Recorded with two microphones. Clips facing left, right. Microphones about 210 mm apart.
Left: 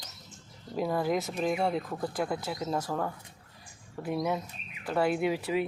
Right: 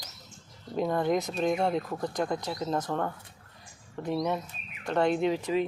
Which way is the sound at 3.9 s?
5° left (ahead or behind).